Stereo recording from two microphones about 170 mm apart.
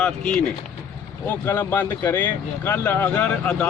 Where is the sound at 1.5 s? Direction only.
15° left (ahead or behind).